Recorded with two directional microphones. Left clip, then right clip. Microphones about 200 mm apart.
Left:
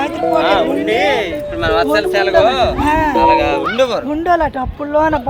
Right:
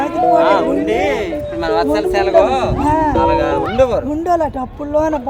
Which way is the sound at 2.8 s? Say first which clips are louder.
Right 1 dB; 25° right (ahead or behind).